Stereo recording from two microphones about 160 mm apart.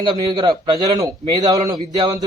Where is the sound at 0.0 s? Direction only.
30° right (ahead or behind).